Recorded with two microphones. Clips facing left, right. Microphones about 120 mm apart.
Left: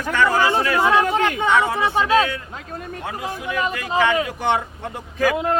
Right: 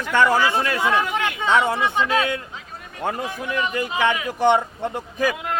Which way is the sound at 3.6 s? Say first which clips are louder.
Left 2 dB; 35° left (ahead or behind).